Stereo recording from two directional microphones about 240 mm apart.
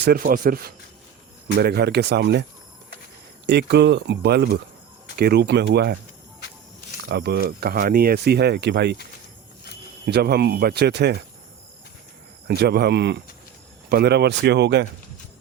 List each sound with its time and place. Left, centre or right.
0.0 s speech: right
3.4 s speech: right
7.1 s speech: right
10.1 s speech: right
12.5 s speech: right